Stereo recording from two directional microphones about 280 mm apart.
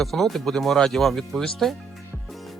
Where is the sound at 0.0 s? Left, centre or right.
Centre.